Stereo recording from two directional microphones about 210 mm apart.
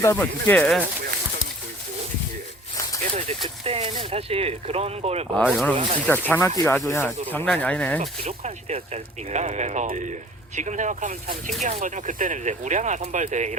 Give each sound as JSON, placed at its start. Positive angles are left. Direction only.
{"t": 0.0, "sound": "speech", "side_deg": 10}
{"t": 3.0, "sound": "speech", "side_deg": -30}
{"t": 5.3, "sound": "speech", "side_deg": 0}
{"t": 8.0, "sound": "speech", "side_deg": -30}